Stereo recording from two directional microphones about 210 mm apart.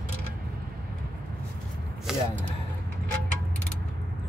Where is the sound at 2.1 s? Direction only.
5° right (ahead or behind).